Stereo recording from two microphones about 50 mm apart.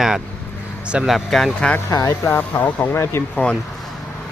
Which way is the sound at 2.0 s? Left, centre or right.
Left.